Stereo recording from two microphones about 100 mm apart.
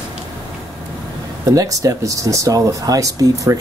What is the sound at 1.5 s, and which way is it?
Speech, 35° right (ahead or behind).